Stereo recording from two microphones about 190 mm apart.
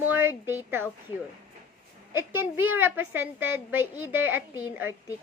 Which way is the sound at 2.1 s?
10° right (ahead or behind).